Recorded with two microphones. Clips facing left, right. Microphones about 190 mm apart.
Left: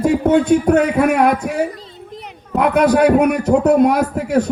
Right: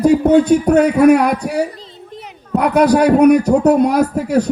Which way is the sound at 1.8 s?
Centre (ahead or behind).